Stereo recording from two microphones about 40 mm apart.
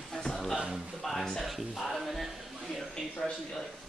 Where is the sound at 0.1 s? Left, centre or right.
Centre.